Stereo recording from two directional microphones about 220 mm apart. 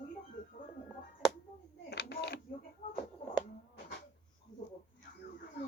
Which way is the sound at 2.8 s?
30° left (ahead or behind).